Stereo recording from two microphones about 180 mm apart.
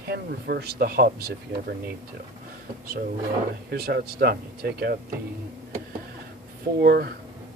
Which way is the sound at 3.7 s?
60° right (ahead or behind).